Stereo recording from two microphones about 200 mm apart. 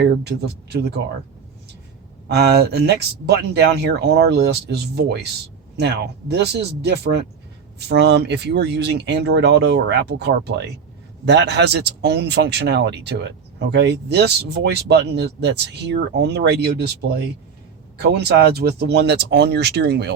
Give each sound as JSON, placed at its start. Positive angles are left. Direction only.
{"t": 0.0, "sound": "speech", "side_deg": -55}
{"t": 2.2, "sound": "speech", "side_deg": -55}
{"t": 17.9, "sound": "speech", "side_deg": -55}